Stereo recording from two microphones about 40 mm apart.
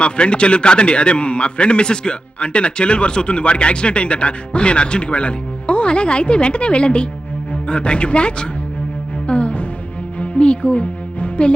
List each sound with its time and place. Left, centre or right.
0.0 s a man's voice: left
9.2 s music: left